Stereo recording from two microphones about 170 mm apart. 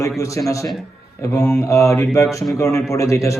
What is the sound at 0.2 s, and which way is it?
A man's voice, 20° left (ahead or behind).